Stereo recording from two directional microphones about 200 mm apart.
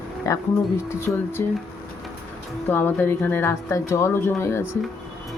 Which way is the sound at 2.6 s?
10° left (ahead or behind).